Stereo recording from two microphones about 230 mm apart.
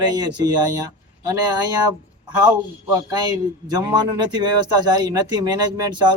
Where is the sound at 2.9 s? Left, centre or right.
Centre.